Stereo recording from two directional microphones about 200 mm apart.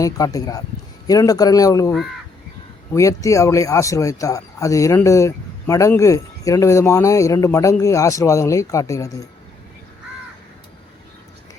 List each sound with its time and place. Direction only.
0.0 s speech: 15° left (ahead or behind)
2.9 s speech: 15° left (ahead or behind)